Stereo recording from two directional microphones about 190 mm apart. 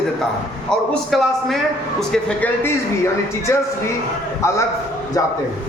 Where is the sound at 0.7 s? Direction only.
Centre (ahead or behind).